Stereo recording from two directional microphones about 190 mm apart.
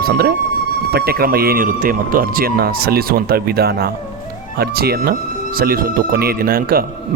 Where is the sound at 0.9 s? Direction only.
55° right (ahead or behind).